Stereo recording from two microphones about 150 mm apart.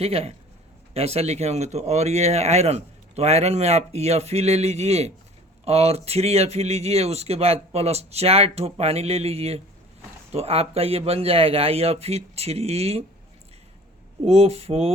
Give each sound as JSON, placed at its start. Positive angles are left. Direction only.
{"t": 0.0, "sound": "speech", "side_deg": -45}
{"t": 14.3, "sound": "speech", "side_deg": -40}